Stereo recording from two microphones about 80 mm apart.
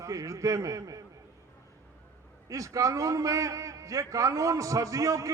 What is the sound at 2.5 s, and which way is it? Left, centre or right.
A man's voice, right.